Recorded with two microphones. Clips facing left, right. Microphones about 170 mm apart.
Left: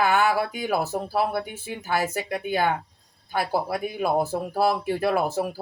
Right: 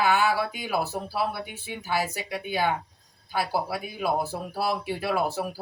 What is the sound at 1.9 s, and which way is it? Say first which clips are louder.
Speech: left 3 dB; 50° left (ahead or behind).